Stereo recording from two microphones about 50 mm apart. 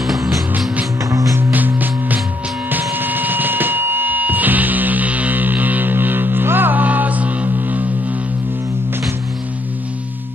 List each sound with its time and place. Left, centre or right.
0.0 s music: centre
1.1 s music: right
1.5 s music: right